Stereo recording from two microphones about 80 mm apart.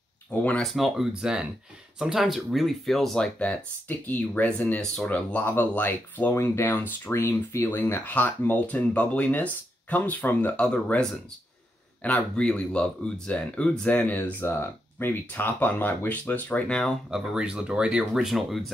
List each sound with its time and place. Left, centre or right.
0.3 s speech: centre
0.6 s speech: centre
4.1 s speech: left
17.1 s speech: centre